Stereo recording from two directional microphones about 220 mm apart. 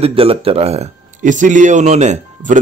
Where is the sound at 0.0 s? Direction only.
25° right (ahead or behind).